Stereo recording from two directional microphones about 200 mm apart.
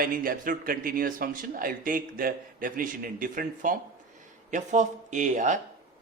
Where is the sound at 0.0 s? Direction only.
45° right (ahead or behind).